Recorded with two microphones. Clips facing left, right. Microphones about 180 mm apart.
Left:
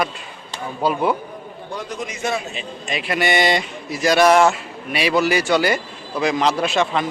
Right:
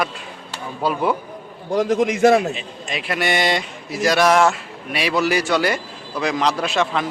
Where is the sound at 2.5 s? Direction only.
Centre (ahead or behind).